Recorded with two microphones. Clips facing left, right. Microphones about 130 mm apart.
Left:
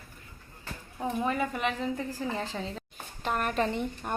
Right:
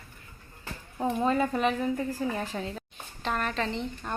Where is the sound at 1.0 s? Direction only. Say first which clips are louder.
Right 4 dB; 20° right (ahead or behind).